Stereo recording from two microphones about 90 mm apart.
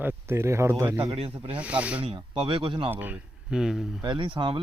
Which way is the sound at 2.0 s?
90° right.